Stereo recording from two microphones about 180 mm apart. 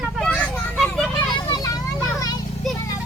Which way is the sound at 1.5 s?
20° left (ahead or behind).